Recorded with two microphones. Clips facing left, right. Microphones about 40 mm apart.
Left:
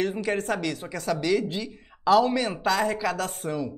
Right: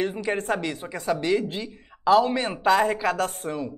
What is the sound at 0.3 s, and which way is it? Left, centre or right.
Speech, centre.